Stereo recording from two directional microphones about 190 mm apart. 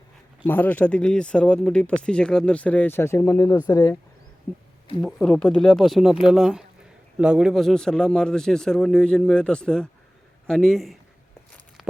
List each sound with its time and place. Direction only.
0.4 s speech: 10° left (ahead or behind)
4.5 s speech: 5° left (ahead or behind)